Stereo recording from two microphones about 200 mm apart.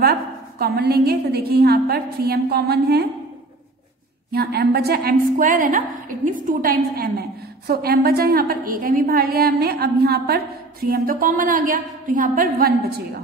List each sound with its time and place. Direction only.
0.0 s a woman's voice: 50° right (ahead or behind)
4.3 s a woman's voice: 50° right (ahead or behind)